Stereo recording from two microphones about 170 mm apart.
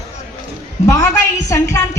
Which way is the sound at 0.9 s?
20° left (ahead or behind).